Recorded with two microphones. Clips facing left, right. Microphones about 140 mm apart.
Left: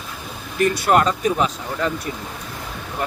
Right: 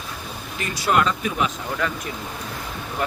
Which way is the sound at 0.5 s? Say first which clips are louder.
Left 5 dB; 55° left (ahead or behind).